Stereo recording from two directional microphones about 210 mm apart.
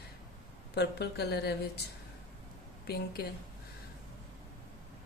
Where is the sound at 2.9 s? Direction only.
50° left (ahead or behind).